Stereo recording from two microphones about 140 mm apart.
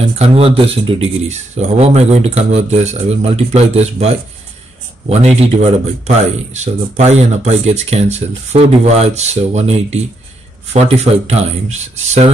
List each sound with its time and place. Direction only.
0.0 s speech: 45° right (ahead or behind)
1.3 s speech: 50° right (ahead or behind)